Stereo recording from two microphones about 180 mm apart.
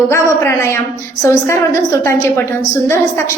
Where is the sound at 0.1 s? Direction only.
15° left (ahead or behind).